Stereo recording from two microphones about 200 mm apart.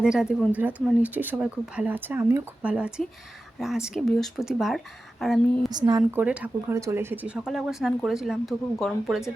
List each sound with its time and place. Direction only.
0.0 s speech: 5° right (ahead or behind)
5.7 s speech: 20° right (ahead or behind)
6.0 s speech: 5° right (ahead or behind)